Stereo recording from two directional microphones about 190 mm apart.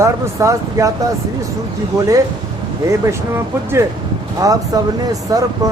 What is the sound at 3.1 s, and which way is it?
Speech, 15° right (ahead or behind).